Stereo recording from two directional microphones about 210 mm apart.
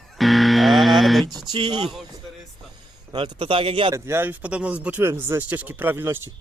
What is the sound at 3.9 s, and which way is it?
Speech, 10° right (ahead or behind).